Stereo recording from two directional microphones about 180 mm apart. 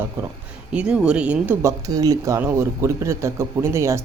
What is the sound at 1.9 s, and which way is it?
A man's voice, 20° right (ahead or behind).